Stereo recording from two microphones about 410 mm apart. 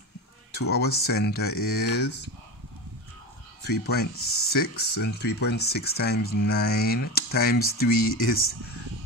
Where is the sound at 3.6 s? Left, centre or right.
Left.